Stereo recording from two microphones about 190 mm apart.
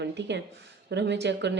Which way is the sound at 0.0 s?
65° right (ahead or behind).